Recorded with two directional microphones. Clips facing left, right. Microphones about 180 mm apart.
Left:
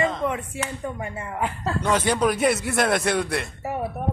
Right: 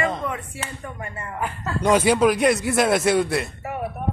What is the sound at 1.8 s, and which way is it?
A man's voice, 10° right (ahead or behind).